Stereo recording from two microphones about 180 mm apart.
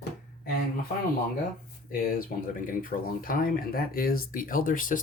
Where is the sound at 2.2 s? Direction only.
50° left (ahead or behind).